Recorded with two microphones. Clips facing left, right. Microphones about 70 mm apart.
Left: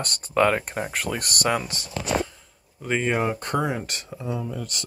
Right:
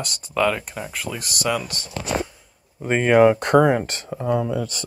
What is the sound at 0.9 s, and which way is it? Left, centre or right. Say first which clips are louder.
Speech: left 2 dB; left.